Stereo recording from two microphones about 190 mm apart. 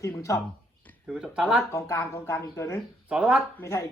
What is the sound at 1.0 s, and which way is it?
Speech, 5° right (ahead or behind).